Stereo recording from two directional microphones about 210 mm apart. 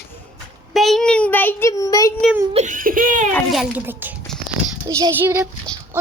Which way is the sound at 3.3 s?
5° left (ahead or behind).